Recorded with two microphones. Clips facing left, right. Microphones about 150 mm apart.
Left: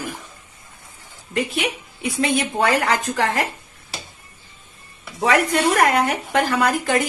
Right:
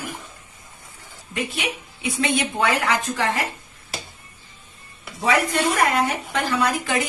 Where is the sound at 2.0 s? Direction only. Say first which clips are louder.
Left 2 dB; 40° left (ahead or behind).